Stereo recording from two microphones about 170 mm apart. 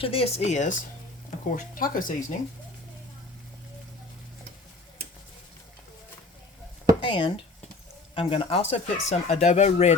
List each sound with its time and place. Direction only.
0.0 s speech: 35° left (ahead or behind); by 2.2 s 50° left (ahead or behind)
7.0 s speech: 25° left (ahead or behind)